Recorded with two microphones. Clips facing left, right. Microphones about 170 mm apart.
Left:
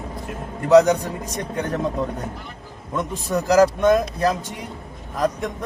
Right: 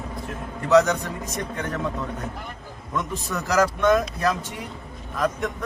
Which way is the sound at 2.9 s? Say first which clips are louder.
Left 5 dB; 35° left (ahead or behind).